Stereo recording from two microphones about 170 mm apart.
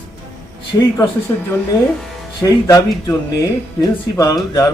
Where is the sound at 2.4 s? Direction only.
20° left (ahead or behind).